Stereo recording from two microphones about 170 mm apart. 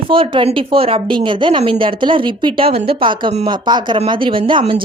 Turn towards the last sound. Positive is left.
turn(degrees=-30)  # may be behind; listen again after turning